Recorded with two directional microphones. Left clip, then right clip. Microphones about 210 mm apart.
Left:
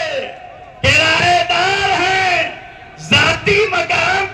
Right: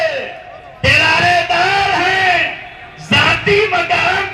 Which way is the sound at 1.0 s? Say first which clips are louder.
Right 1 dB; 40° right (ahead or behind).